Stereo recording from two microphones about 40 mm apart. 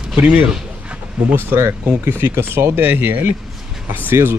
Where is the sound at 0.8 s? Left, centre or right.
Right.